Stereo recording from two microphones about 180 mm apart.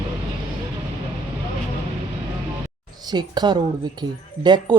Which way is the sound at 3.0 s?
25° right (ahead or behind).